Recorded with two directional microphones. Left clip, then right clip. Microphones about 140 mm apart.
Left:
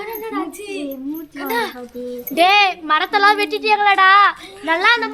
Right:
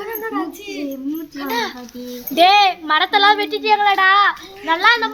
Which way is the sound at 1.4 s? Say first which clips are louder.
Left 2 dB; 35° left (ahead or behind).